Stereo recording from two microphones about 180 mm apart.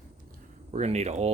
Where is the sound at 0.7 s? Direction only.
40° right (ahead or behind).